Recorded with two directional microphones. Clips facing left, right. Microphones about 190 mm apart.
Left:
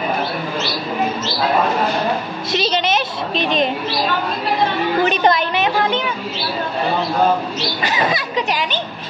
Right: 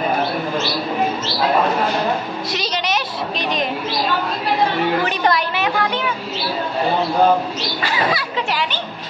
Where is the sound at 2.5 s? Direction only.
25° left (ahead or behind).